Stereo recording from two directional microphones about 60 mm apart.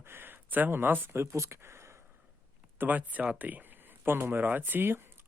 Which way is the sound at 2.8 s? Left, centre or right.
Right.